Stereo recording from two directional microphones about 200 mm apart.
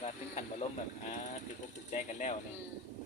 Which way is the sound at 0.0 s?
35° left (ahead or behind).